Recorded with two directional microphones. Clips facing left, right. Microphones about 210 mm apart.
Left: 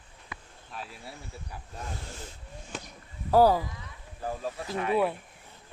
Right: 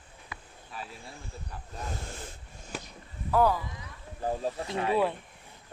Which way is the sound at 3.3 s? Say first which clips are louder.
Left 4 dB; 35° left (ahead or behind).